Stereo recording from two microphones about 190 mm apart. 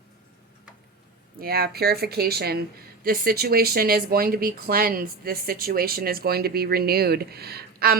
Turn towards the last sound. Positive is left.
turn(degrees=-55)  # may be behind; listen again after turning